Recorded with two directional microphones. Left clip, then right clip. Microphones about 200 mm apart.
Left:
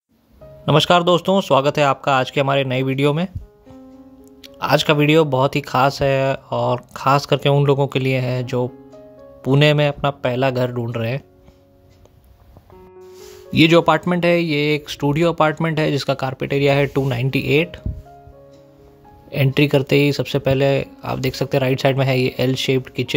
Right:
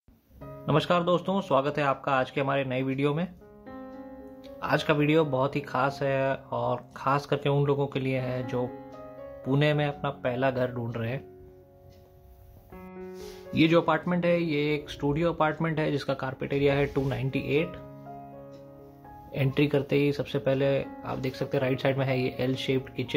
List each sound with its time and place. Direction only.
0.7 s speech: 55° left (ahead or behind)
4.4 s speech: 50° left (ahead or behind)
13.5 s speech: 50° left (ahead or behind)
19.3 s speech: 50° left (ahead or behind)